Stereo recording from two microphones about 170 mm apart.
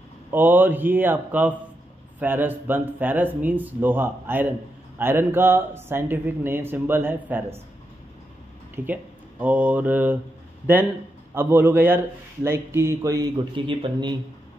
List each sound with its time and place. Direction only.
0.3 s speech: 10° right (ahead or behind)
8.7 s speech: 10° right (ahead or behind)
11.3 s speech: 10° right (ahead or behind); by 14.1 s 30° right (ahead or behind)